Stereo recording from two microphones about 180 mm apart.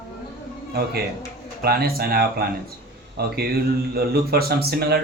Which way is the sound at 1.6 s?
60° right (ahead or behind).